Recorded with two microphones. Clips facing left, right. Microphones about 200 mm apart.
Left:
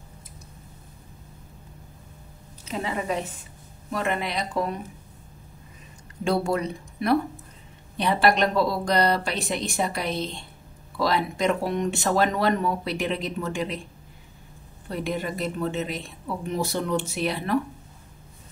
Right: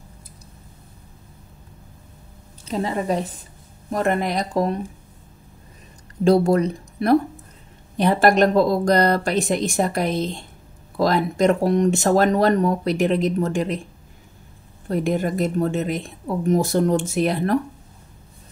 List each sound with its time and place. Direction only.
2.6 s a woman's voice: 35° right (ahead or behind)
6.2 s speech: 40° right (ahead or behind)
14.9 s speech: 45° right (ahead or behind)